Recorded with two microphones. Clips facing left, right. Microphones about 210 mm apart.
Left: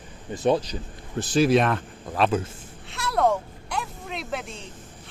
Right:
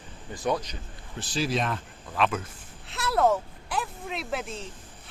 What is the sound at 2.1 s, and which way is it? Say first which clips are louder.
Speech: left 4 dB; 35° left (ahead or behind).